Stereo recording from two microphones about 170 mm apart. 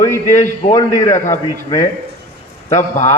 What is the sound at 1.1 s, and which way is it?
Speech, 45° left (ahead or behind).